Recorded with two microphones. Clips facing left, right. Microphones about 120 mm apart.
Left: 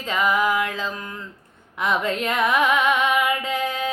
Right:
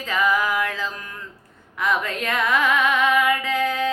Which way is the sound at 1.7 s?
20° left (ahead or behind).